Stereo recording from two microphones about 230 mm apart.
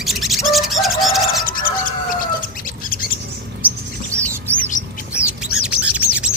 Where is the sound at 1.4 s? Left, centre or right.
Left.